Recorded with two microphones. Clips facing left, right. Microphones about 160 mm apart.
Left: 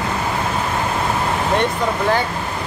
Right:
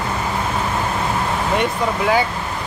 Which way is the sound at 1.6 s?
5° right (ahead or behind).